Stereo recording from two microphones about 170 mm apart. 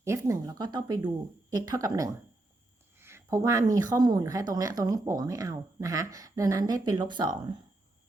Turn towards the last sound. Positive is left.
turn(degrees=-25)  # may be behind; listen again after turning